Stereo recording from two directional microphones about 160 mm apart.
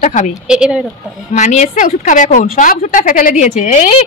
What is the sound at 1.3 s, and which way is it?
A woman's voice, 45° left (ahead or behind).